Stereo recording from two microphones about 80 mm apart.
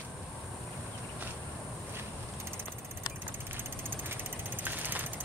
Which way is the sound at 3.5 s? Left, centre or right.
Right.